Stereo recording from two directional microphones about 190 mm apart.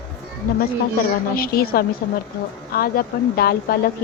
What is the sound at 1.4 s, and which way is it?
A woman's voice, 50° left (ahead or behind).